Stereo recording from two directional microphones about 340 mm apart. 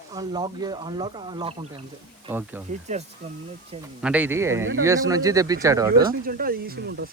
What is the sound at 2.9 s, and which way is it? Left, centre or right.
Speech, centre.